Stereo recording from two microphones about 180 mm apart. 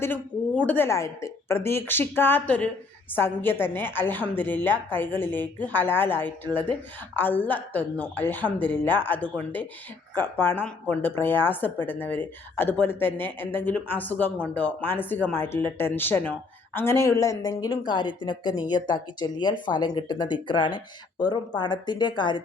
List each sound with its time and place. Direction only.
0.0 s a woman's voice: 10° left (ahead or behind); by 22.4 s 25° left (ahead or behind)